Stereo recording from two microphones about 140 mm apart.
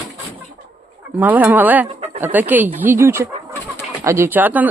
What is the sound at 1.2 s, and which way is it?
Speech, 10° right (ahead or behind).